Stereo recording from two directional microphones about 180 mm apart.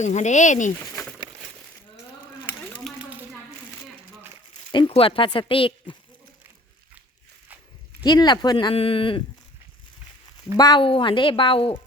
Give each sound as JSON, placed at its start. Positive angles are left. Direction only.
{"t": 0.0, "sound": "speech", "side_deg": 40}
{"t": 0.8, "sound": "speech", "side_deg": 15}
{"t": 4.5, "sound": "speech", "side_deg": 25}
{"t": 8.0, "sound": "speech", "side_deg": 25}
{"t": 10.6, "sound": "speech", "side_deg": 25}